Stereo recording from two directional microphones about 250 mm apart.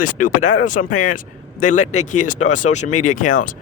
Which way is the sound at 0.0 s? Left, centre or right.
Left.